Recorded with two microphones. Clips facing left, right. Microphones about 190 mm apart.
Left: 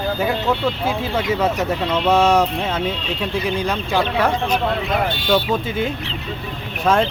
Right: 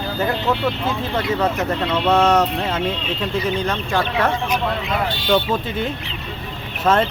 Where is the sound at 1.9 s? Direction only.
Centre (ahead or behind).